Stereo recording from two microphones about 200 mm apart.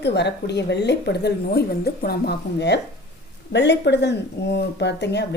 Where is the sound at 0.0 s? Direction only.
60° left (ahead or behind).